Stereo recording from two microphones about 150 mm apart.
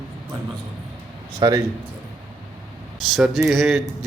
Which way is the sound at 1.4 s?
25° right (ahead or behind).